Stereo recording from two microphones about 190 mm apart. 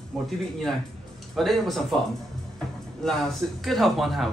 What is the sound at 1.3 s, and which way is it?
Speech, centre (ahead or behind).